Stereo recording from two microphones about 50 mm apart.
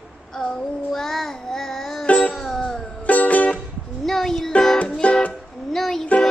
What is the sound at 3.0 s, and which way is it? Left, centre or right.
Music, left.